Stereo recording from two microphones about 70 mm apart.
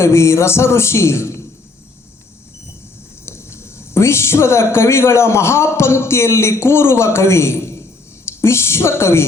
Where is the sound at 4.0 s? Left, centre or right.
Left.